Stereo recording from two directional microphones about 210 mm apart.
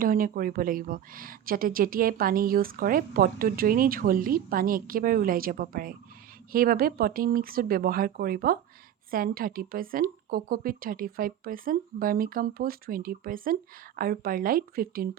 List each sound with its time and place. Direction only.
0.0 s a woman's voice: 40° right (ahead or behind)